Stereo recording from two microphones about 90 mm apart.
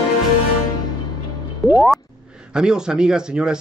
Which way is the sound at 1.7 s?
Centre (ahead or behind).